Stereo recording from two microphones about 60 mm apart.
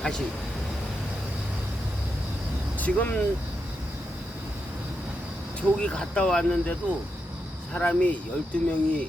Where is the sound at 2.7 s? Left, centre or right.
Left.